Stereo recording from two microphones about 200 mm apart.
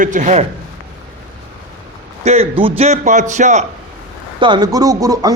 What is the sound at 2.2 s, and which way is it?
A man's voice, 30° right (ahead or behind).